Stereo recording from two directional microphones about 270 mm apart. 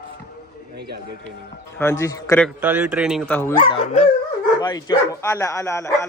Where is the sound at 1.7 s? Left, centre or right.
Centre.